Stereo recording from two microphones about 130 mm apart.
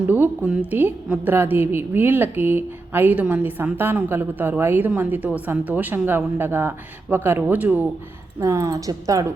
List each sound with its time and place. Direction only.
0.1 s a woman's voice: 10° right (ahead or behind)
8.4 s speech: 25° right (ahead or behind)